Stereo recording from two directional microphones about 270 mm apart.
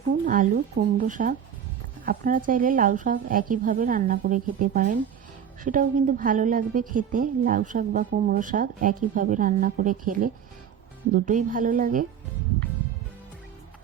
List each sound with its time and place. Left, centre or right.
0.3 s a woman's voice: right